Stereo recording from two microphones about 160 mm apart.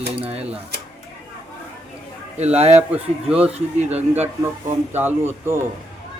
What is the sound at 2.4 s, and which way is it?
Speech, 40° right (ahead or behind).